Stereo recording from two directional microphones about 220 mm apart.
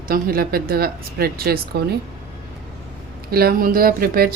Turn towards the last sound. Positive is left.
turn(degrees=-40)  # may be behind; listen again after turning